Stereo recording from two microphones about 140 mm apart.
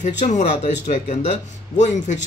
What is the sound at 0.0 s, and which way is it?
Speech, 55° left (ahead or behind).